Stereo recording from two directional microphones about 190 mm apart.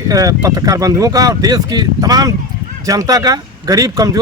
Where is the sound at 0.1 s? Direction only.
20° right (ahead or behind).